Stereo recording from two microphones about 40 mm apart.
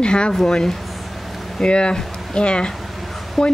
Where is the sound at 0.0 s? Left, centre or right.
Left.